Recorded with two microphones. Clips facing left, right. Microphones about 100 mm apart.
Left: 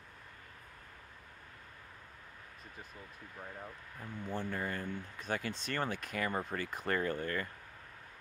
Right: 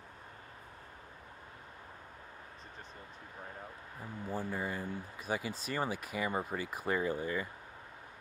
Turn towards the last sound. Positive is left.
turn(degrees=-10)  # may be behind; listen again after turning